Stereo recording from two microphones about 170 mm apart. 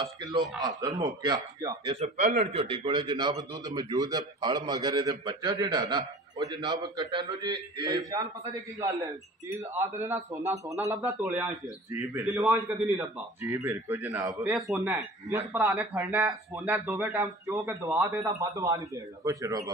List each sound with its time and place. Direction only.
0.2 s a man's voice: 25° right (ahead or behind)
2.0 s a man's voice: 45° right (ahead or behind); by 19.7 s 20° right (ahead or behind)